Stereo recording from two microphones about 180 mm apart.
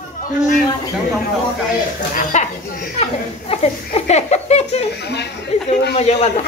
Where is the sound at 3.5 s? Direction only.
35° left (ahead or behind).